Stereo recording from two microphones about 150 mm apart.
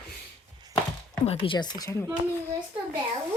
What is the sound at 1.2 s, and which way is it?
Speech, 40° left (ahead or behind).